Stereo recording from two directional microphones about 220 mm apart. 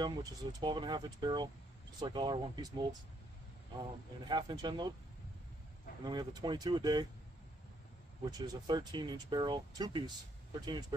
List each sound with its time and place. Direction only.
0.0 s speech: 20° right (ahead or behind)
4.3 s speech: 20° right (ahead or behind)
6.0 s speech: 20° right (ahead or behind)
8.3 s speech: 20° right (ahead or behind)